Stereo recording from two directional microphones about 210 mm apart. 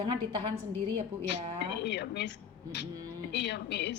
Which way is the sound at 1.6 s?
55° left (ahead or behind).